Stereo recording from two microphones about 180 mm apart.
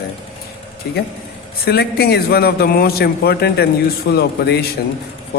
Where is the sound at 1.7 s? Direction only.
65° left (ahead or behind).